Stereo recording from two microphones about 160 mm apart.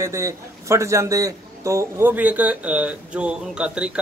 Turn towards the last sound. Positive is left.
turn(degrees=-5)  # may be behind; listen again after turning